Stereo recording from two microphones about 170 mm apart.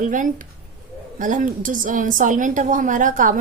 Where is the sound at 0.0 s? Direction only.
50° right (ahead or behind).